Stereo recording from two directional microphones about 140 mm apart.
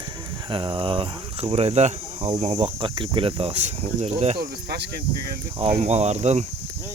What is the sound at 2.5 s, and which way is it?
Speech, 35° right (ahead or behind).